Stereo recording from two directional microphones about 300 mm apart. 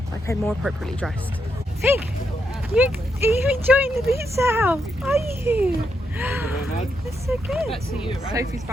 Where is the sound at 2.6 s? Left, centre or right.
Centre.